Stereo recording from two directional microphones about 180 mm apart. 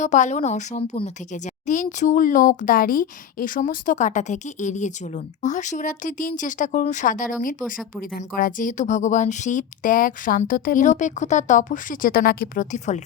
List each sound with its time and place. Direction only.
0.0 s a woman's voice: 40° left (ahead or behind)